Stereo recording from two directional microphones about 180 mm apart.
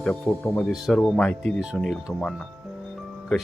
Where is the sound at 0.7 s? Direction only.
Centre (ahead or behind).